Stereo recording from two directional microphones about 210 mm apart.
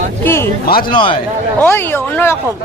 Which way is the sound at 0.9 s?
25° left (ahead or behind).